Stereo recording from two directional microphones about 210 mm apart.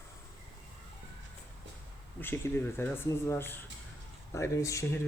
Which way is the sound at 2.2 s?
10° left (ahead or behind).